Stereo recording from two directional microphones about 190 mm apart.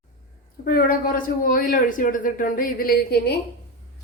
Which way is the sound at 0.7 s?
50° left (ahead or behind).